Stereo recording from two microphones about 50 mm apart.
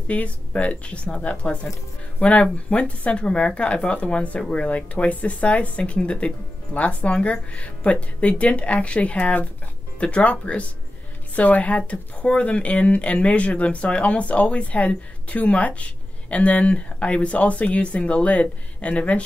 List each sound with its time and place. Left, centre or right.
0.1 s speech: left